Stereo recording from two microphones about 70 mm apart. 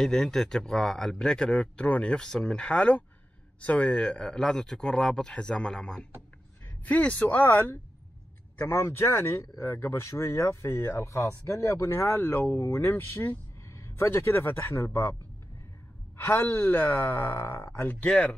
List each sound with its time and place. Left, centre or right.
0.0 s speech: centre
6.8 s speech: left
8.6 s speech: left
16.2 s speech: left
18.0 s speech: centre